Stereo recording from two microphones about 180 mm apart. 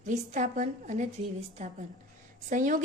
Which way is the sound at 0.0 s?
40° right (ahead or behind).